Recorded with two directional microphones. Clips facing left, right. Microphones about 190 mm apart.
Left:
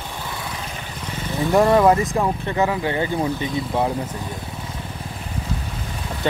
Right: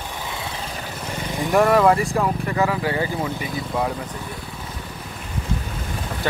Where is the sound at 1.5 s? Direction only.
20° left (ahead or behind).